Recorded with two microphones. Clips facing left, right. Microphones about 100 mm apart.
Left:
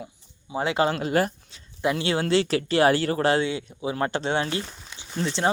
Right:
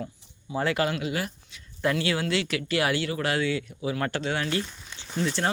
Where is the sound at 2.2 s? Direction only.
35° left (ahead or behind).